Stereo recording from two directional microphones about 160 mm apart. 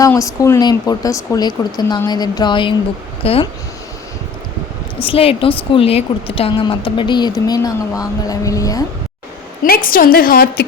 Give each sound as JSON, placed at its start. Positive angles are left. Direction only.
{"t": 0.1, "sound": "a woman's voice", "side_deg": 15}
{"t": 5.0, "sound": "a woman's voice", "side_deg": 35}
{"t": 9.6, "sound": "a woman's voice", "side_deg": 65}